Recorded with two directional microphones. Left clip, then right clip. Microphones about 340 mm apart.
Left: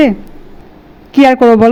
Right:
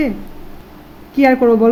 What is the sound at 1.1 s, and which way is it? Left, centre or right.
Speech, left.